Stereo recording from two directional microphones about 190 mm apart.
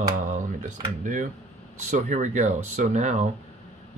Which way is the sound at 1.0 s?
45° right (ahead or behind).